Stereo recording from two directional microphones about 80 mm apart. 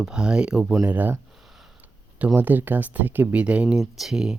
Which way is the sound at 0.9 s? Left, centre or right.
Right.